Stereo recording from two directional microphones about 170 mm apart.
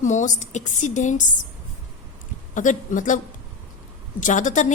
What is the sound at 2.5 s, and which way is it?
Speech, 50° left (ahead or behind).